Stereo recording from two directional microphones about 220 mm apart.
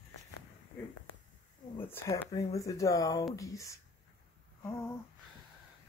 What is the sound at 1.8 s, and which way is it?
Speech, 10° left (ahead or behind).